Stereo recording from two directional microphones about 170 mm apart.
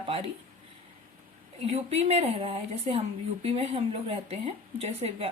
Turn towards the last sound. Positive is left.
turn(degrees=-35)  # may be behind; listen again after turning